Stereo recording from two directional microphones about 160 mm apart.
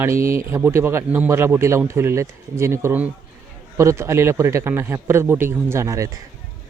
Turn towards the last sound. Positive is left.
turn(degrees=-20)  # may be behind; listen again after turning